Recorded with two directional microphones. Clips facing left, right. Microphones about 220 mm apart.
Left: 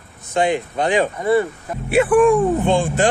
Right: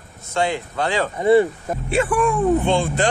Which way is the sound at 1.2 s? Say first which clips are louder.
Right 7 dB; 25° right (ahead or behind).